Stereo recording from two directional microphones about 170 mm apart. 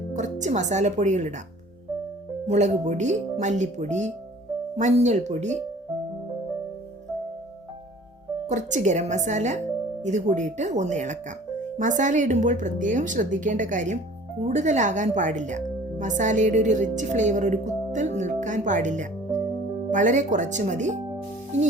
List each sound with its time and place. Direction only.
0.1 s speech: 45° right (ahead or behind)
2.5 s a woman's voice: 45° right (ahead or behind)
8.4 s a woman's voice: 45° right (ahead or behind)